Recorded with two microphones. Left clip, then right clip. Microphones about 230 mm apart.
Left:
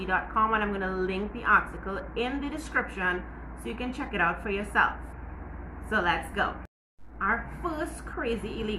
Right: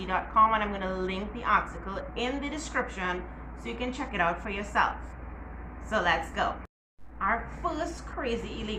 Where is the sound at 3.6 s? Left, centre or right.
Centre.